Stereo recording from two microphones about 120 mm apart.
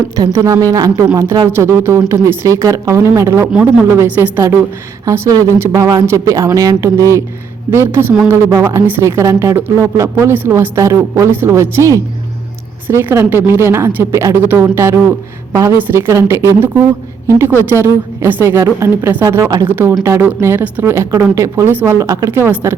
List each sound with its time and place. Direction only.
0.2 s a woman's voice: 25° right (ahead or behind)